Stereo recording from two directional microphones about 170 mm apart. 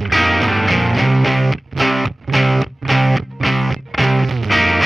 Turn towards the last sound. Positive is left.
turn(degrees=0)  # may be behind; listen again after turning